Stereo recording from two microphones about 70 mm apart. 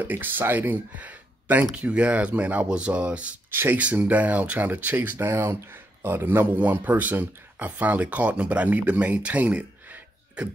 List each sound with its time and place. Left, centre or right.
0.0 s speech: right
3.5 s speech: right
5.3 s speech: right